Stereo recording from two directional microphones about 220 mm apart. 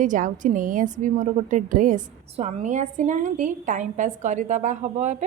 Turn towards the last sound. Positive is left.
turn(degrees=-35)  # may be behind; listen again after turning